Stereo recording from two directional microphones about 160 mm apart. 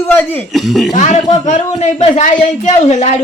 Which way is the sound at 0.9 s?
45° left (ahead or behind).